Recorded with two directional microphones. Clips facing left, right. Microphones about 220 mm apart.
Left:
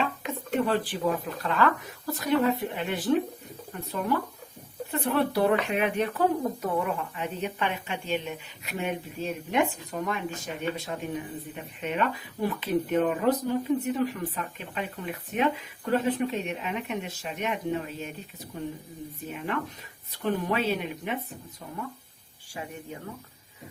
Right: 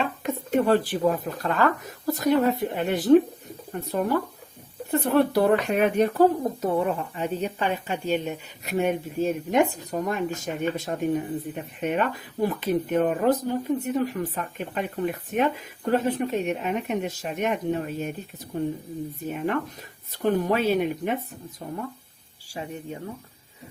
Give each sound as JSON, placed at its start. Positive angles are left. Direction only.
{"t": 0.0, "sound": "speech", "side_deg": -45}
{"t": 19.3, "sound": "speech", "side_deg": -50}
{"t": 22.5, "sound": "speech", "side_deg": -25}